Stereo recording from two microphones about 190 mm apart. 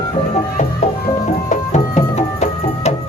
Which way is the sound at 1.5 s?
35° left (ahead or behind).